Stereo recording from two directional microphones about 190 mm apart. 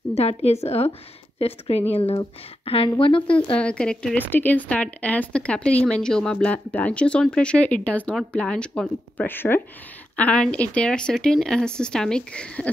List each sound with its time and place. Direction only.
0.1 s a woman's voice: 35° left (ahead or behind)
3.5 s speech: 5° left (ahead or behind)